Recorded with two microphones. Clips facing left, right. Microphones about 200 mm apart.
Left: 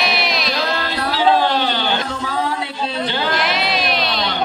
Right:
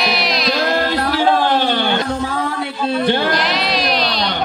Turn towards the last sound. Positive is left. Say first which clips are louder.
# right 2 dB
turn(degrees=0)  # may be behind; listen again after turning